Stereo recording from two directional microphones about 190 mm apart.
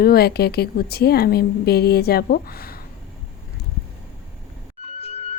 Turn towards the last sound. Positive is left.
turn(degrees=35)  # may be behind; listen again after turning